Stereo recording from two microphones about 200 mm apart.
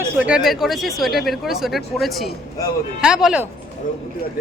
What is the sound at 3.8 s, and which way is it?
Speech, 45° left (ahead or behind).